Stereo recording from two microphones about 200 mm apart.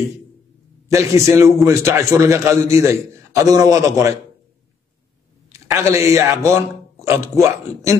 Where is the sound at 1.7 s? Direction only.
15° right (ahead or behind).